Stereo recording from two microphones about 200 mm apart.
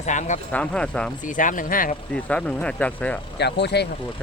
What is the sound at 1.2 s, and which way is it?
Speech, 40° left (ahead or behind).